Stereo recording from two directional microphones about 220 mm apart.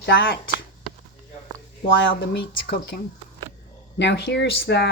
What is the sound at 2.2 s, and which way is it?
Speech, 50° left (ahead or behind).